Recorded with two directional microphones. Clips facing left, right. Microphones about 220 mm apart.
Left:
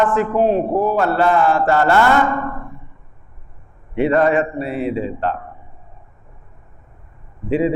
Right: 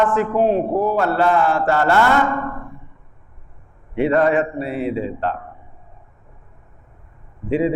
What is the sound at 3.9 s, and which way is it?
A man's voice, 15° left (ahead or behind).